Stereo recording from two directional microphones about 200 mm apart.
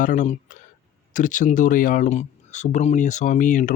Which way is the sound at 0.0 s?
40° left (ahead or behind).